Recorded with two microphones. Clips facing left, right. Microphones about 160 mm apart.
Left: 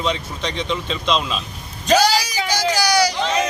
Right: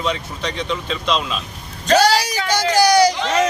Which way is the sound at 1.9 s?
60° right (ahead or behind).